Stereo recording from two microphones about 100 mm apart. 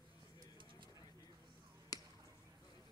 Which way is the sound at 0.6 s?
55° right (ahead or behind).